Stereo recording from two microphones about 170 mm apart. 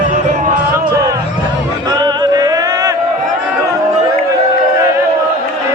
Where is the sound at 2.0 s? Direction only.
20° right (ahead or behind).